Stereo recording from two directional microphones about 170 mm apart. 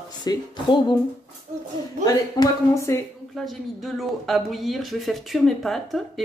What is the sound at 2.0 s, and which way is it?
Speech, 20° left (ahead or behind).